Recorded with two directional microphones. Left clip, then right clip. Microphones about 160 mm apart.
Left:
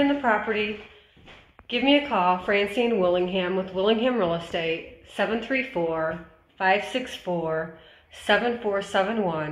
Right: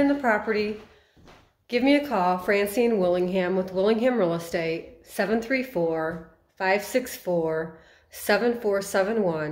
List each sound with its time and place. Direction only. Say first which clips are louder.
0.0 s a woman's voice: even; 30° right (ahead or behind)
1.7 s a woman's voice: left 1 dB; 35° right (ahead or behind)